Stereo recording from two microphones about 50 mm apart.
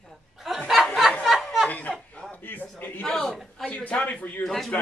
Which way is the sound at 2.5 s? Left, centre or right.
Left.